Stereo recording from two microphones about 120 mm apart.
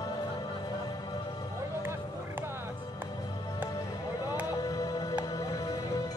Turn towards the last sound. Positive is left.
turn(degrees=30)  # may be behind; listen again after turning